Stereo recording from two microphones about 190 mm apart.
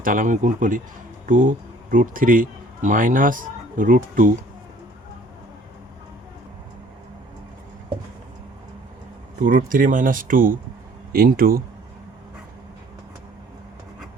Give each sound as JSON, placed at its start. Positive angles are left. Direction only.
{"t": 0.0, "sound": "speech", "side_deg": -45}
{"t": 9.4, "sound": "speech", "side_deg": -45}